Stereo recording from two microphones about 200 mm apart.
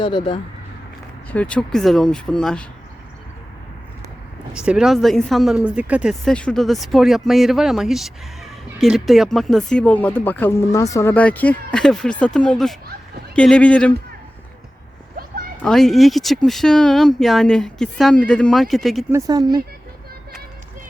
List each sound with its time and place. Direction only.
0.0 s speech: 25° left (ahead or behind)
1.3 s speech: 5° left (ahead or behind)
4.5 s speech: 5° right (ahead or behind)
15.6 s speech: centre (ahead or behind)
19.1 s speech: 20° right (ahead or behind)